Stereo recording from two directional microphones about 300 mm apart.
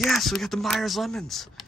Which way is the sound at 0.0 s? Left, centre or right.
Centre.